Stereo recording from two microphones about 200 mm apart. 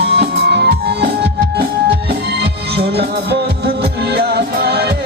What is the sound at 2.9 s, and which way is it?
Music, 55° right (ahead or behind).